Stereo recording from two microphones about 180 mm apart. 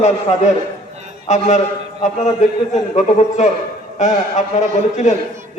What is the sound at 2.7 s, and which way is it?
A man's voice, 40° left (ahead or behind).